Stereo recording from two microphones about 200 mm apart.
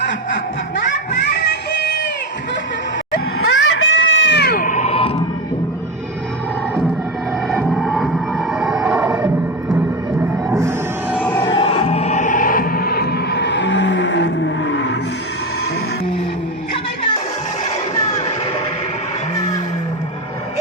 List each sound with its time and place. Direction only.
3.3 s music: 70° left (ahead or behind); by 5.1 s 30° left (ahead or behind)
7.4 s music: centre (ahead or behind)
10.5 s music: 15° right (ahead or behind)
11.2 s a sound: 10° left (ahead or behind)
11.4 s music: 25° left (ahead or behind); by 14.9 s 65° left (ahead or behind)